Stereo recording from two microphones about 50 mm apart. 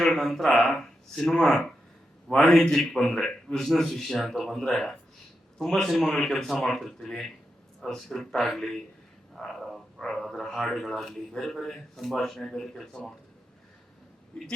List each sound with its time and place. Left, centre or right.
0.0 s a man's voice: centre
14.3 s a man's voice: centre